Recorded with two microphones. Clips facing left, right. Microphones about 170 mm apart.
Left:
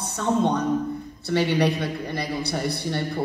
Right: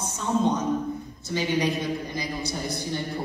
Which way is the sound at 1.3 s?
65° left (ahead or behind).